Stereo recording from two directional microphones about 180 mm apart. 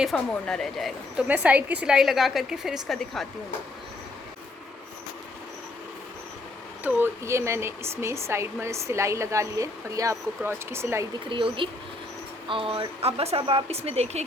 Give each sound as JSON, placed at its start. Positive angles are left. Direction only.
{"t": 0.0, "sound": "a woman's voice", "side_deg": 5}
{"t": 6.8, "sound": "speech", "side_deg": -15}
{"t": 11.3, "sound": "a woman's voice", "side_deg": -30}